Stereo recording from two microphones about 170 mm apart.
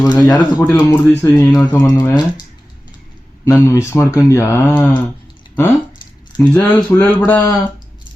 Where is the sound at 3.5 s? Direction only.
20° left (ahead or behind).